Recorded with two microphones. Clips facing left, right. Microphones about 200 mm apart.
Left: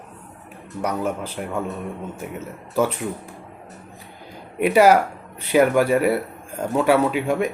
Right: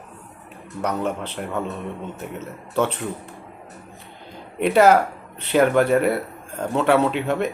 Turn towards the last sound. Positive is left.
turn(degrees=10)  # may be behind; listen again after turning